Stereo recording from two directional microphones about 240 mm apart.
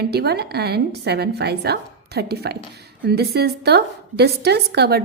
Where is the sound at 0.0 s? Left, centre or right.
Right.